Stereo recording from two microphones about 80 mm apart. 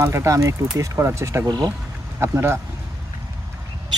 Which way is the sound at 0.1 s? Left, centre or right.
Right.